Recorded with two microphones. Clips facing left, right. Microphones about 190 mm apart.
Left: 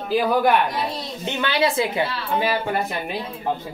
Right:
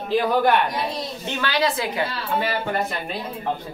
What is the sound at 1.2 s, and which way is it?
Speech, 25° left (ahead or behind).